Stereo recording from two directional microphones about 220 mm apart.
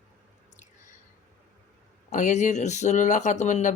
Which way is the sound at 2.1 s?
35° left (ahead or behind).